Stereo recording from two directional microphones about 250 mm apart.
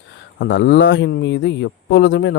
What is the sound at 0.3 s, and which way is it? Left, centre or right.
Speech, left.